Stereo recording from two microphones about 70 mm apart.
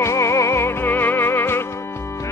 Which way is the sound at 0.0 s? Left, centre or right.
Left.